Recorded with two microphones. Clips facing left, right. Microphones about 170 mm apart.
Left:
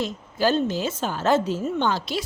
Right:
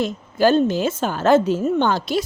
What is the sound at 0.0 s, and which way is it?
Speech, 55° right (ahead or behind).